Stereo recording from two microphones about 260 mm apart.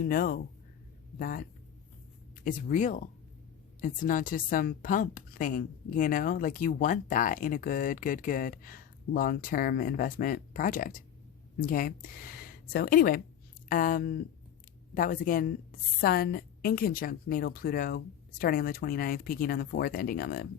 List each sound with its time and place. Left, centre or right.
0.0 s a woman's voice: left